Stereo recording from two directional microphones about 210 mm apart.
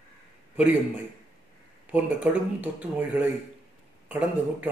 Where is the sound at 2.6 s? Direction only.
5° right (ahead or behind).